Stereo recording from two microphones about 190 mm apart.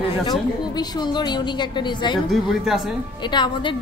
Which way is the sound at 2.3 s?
Centre (ahead or behind).